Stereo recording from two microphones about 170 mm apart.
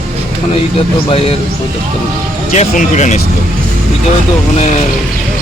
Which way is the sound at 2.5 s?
45° left (ahead or behind).